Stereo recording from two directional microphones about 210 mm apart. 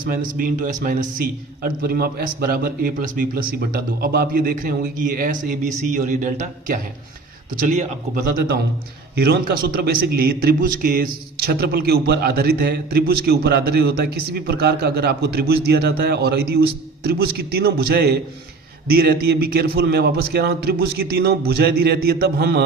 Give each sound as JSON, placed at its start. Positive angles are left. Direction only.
{"t": 0.0, "sound": "a man's voice", "side_deg": -40}
{"t": 9.1, "sound": "a man's voice", "side_deg": -50}